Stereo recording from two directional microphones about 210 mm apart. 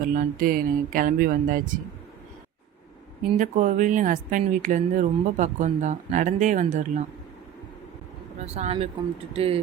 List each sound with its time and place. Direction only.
0.0 s speech: 40° right (ahead or behind)
3.3 s speech: 35° right (ahead or behind)
8.5 s speech: 30° right (ahead or behind)